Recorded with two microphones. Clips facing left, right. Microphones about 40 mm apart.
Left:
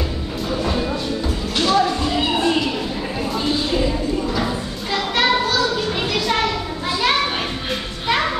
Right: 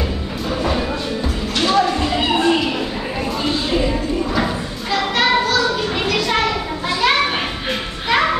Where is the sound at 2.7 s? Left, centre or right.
Right.